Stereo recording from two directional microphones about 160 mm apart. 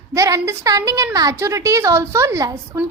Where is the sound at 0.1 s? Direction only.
20° right (ahead or behind).